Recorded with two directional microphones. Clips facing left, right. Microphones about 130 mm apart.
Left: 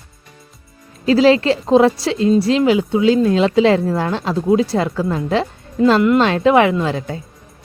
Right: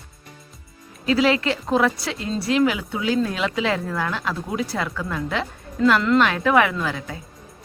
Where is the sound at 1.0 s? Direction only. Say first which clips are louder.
Left 7 dB; 30° left (ahead or behind).